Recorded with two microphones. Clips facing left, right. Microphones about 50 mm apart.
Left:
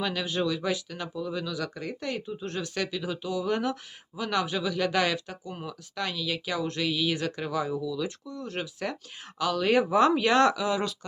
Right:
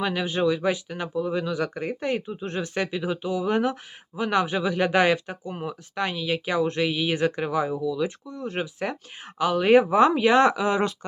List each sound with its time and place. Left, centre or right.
0.0 s speech: right